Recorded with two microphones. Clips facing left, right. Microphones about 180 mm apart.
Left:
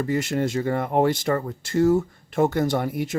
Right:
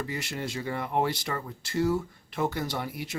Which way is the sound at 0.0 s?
45° left (ahead or behind).